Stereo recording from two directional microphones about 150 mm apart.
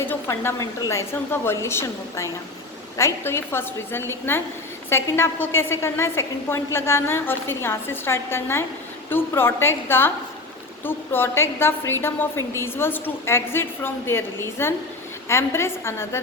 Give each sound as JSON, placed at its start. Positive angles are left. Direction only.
{"t": 0.0, "sound": "a woman's voice", "side_deg": 15}